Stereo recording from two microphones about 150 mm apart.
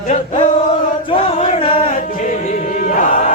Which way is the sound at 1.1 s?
40° left (ahead or behind).